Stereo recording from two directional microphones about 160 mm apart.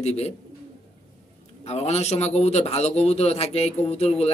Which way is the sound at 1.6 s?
45° left (ahead or behind).